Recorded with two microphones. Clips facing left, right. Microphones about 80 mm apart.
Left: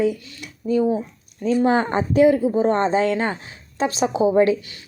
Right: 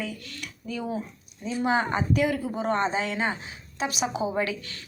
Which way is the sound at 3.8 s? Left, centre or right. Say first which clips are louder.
Left 8 dB; left.